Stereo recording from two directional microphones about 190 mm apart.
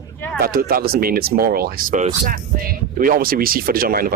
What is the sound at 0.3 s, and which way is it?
A woman's voice, 50° right (ahead or behind).